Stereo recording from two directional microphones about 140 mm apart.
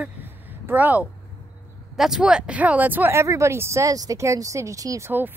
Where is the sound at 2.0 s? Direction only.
5° right (ahead or behind).